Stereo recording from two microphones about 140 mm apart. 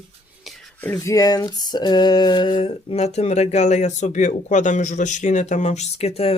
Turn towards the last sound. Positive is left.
turn(degrees=45)  # may be behind; listen again after turning